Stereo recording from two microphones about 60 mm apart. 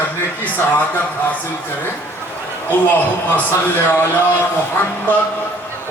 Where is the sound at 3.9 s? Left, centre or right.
Left.